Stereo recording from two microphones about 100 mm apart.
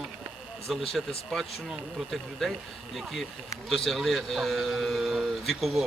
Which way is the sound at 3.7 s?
5° left (ahead or behind).